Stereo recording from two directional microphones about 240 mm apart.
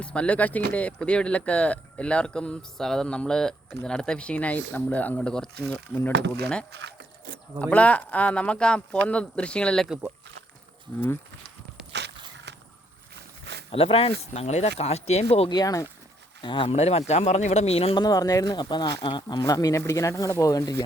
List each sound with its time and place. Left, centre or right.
0.0 s speech: centre
6.1 s speech: right
6.4 s speech: centre
6.7 s a sound: right
7.6 s speech: centre
11.9 s walk: right
13.4 s a sound: right
13.7 s speech: left